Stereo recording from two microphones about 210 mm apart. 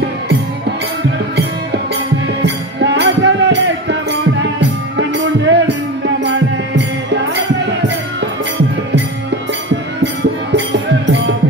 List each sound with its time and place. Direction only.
2.4 s music: 55° right (ahead or behind)
10.5 s music: 60° right (ahead or behind)